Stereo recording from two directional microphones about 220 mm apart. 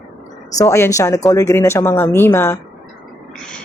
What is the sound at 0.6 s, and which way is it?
Speech, 15° left (ahead or behind).